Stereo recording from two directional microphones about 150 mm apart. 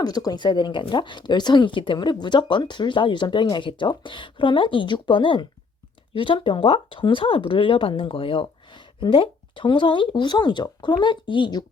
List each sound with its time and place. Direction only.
0.0 s speech: 25° left (ahead or behind)